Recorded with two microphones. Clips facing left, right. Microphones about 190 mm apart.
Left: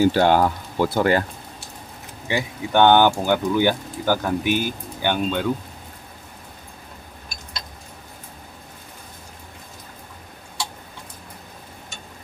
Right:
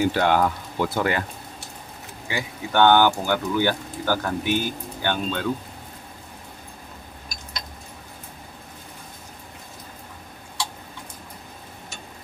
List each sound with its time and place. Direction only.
0.0 s speech: 30° left (ahead or behind)
2.2 s speech: 20° left (ahead or behind)